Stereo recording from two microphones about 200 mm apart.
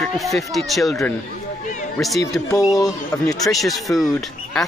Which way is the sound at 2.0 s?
Centre (ahead or behind).